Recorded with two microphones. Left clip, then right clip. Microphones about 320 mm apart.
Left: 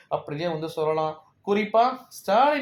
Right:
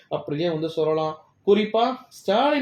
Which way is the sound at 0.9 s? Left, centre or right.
Left.